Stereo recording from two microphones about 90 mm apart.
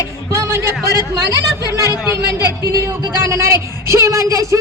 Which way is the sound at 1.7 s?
30° right (ahead or behind).